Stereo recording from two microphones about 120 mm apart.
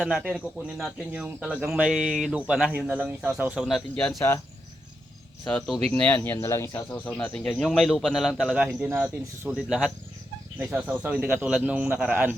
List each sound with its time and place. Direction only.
0.0 s speech: 5° right (ahead or behind)
5.9 s speech: 10° left (ahead or behind)
6.4 s speech: 25° left (ahead or behind)
6.9 s speech: 10° left (ahead or behind); by 9.6 s 20° right (ahead or behind)
9.6 s speech: 5° right (ahead or behind)